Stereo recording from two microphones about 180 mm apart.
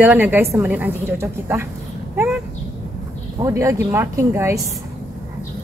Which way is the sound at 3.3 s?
15° right (ahead or behind).